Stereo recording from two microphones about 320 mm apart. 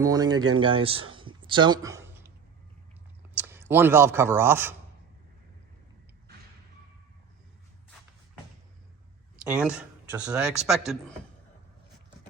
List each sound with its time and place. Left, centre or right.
0.0 s speech: centre
1.1 s a sound: centre
3.3 s speech: centre
9.5 s speech: centre